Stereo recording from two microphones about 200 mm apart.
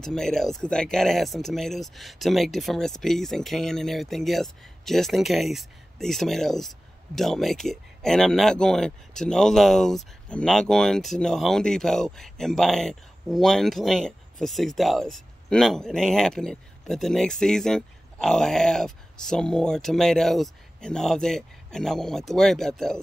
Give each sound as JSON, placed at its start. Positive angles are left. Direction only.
{"t": 0.0, "sound": "speech", "side_deg": 5}